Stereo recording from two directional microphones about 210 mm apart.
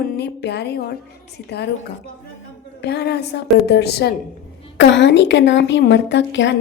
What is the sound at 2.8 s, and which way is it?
A woman's voice, 50° left (ahead or behind).